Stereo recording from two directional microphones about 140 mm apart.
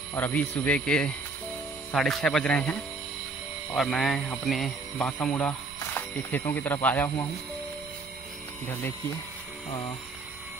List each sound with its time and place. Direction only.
0.1 s a man's voice: 10° left (ahead or behind)